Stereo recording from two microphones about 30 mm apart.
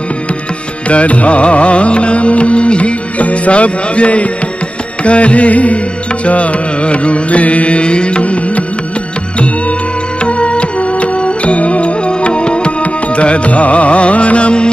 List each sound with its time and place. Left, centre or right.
0.8 s music: left
10.2 s music: left
12.1 s music: left